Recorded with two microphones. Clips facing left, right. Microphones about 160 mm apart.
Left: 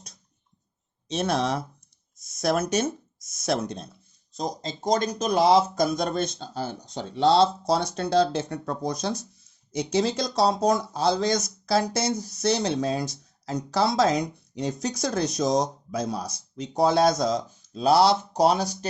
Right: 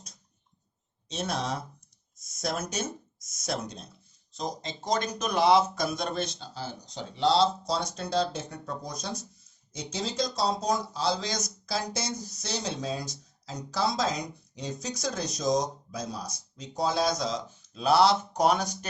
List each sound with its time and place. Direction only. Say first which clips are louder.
1.0 s speech: left 7 dB; 65° left (ahead or behind)
4.4 s speech: left 4 dB; 40° left (ahead or behind)